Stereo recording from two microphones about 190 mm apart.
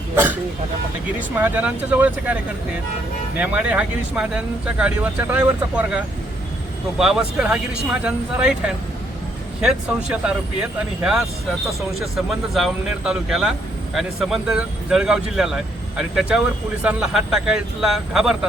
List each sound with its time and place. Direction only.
1.4 s speech: 10° right (ahead or behind)
7.0 s speech: 5° right (ahead or behind)